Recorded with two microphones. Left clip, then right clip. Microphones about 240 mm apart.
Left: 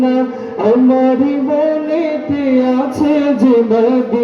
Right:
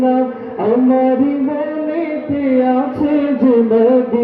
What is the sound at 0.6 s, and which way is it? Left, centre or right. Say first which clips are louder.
Music: left 2 dB; left.